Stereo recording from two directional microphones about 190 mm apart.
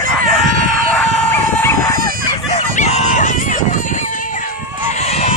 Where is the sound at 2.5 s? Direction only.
35° left (ahead or behind).